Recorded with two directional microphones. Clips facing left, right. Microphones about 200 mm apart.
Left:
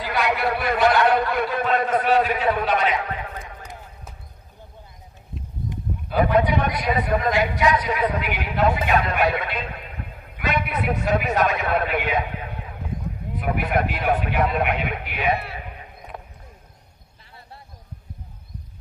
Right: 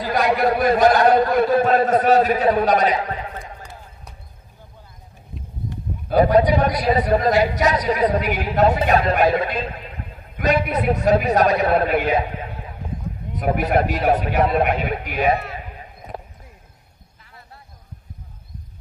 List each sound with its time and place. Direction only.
0.0 s speech: 40° right (ahead or behind)
6.0 s speech: 35° right (ahead or behind)
13.4 s speech: 40° right (ahead or behind)
16.1 s clip-clop: 35° right (ahead or behind)